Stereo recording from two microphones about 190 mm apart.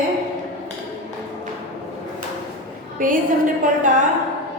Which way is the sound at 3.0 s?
45° right (ahead or behind).